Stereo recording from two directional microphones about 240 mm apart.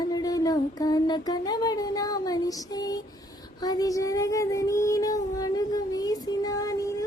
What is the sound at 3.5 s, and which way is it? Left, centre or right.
Child singing, centre.